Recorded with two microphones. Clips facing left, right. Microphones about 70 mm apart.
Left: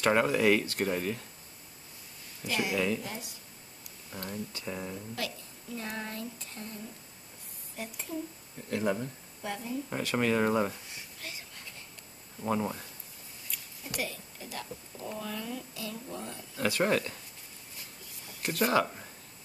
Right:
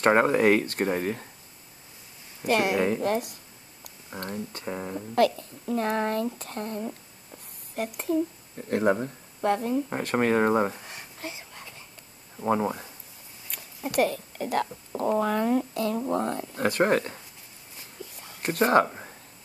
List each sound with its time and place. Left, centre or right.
0.0 s speech: right
2.4 s speech: right
2.8 s speech: right
3.1 s speech: right
4.2 s speech: right
5.1 s speech: right
8.6 s speech: right
9.4 s speech: right
9.8 s speech: right
11.1 s a sound: right
12.4 s speech: right
13.5 s speech: right
18.4 s speech: right